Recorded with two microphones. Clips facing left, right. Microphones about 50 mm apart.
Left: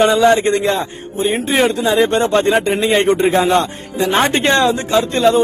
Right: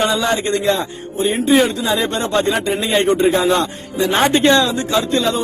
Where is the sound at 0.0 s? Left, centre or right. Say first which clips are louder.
Left 6 dB; left.